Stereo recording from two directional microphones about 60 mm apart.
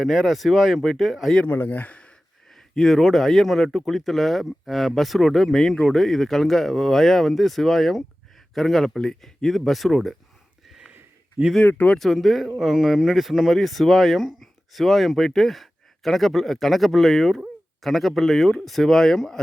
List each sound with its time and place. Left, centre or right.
0.0 s speech: centre
1.5 s speech: left
2.5 s speech: centre
10.7 s a sound: centre
11.6 s speech: left
11.9 s speech: centre